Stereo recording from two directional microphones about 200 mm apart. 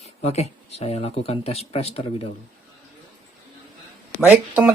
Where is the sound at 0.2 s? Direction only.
30° left (ahead or behind).